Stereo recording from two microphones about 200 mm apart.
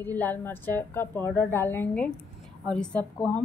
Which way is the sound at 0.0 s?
10° left (ahead or behind).